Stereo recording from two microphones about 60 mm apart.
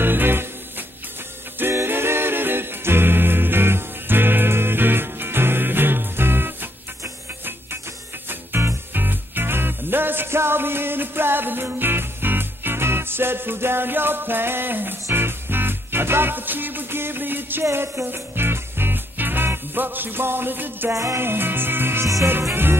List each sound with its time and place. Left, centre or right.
0.0 s music: right
1.9 s music: right
8.3 s music: right
17.6 s music: right
18.0 s music: right
20.9 s music: right
21.2 s music: right
22.0 s music: right
22.4 s music: right